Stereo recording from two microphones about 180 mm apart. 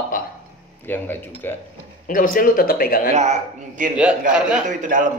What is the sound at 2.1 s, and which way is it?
Speech, 50° left (ahead or behind).